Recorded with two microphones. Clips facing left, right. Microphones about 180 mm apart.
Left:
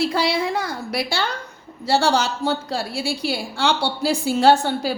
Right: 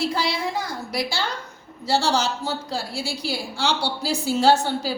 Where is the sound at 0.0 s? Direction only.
65° left (ahead or behind).